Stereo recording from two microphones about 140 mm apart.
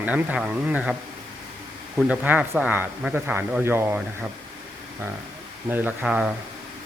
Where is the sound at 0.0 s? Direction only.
10° right (ahead or behind).